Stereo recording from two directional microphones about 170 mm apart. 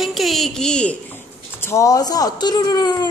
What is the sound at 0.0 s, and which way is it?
A woman's voice, centre (ahead or behind).